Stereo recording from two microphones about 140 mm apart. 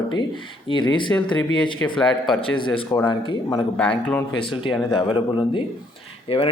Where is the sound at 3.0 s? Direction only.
35° left (ahead or behind).